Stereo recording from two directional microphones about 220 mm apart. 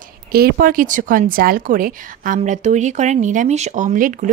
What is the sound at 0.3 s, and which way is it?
A woman's voice, 45° right (ahead or behind).